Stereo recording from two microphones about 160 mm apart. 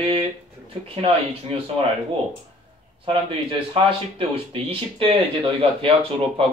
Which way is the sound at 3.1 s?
35° right (ahead or behind).